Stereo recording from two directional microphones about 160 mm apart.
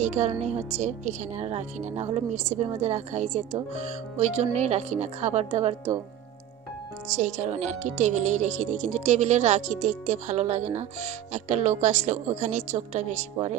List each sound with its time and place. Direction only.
0.0 s speech: 45° right (ahead or behind)
7.2 s speech: 45° right (ahead or behind)